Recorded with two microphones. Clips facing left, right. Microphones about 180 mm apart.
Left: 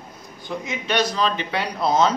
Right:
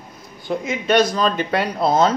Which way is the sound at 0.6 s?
50° right (ahead or behind).